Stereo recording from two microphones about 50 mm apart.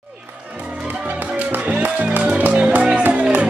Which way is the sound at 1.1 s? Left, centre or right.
Right.